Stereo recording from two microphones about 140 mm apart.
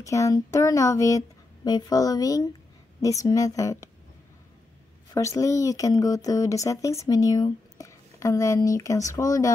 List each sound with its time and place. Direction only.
0.0 s speech: 20° left (ahead or behind)
5.1 s speech: 25° left (ahead or behind)